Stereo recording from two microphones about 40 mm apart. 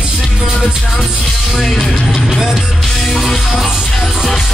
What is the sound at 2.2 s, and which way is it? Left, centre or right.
Speech, centre.